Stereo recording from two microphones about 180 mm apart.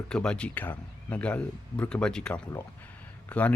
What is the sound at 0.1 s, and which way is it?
Speech, 5° left (ahead or behind).